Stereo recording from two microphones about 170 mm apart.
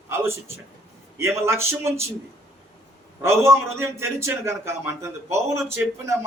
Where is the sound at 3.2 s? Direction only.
15° right (ahead or behind).